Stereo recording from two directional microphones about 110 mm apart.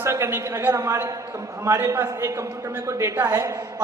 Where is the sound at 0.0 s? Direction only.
25° right (ahead or behind).